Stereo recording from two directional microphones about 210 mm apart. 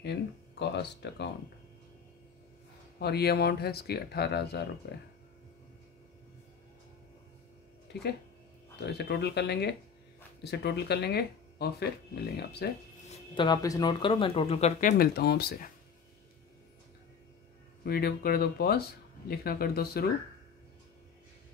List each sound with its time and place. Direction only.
0.6 s speech: 55° left (ahead or behind)
3.0 s speech: 50° left (ahead or behind)
7.9 s speech: 55° left (ahead or behind)
13.1 s speech: 25° left (ahead or behind); by 15.7 s 50° left (ahead or behind)
17.8 s speech: 45° left (ahead or behind)